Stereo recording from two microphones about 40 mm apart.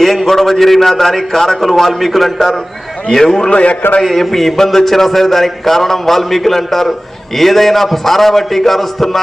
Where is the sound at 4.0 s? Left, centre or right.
Centre.